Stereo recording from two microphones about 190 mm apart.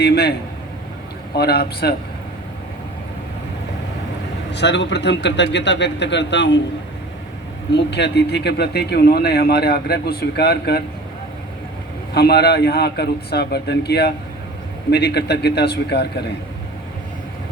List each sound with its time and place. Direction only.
0.0 s speech: 60° left (ahead or behind)
1.4 s speech: 55° left (ahead or behind)
4.5 s speech: 65° left (ahead or behind)
7.7 s speech: 65° left (ahead or behind)
12.1 s speech: 60° left (ahead or behind)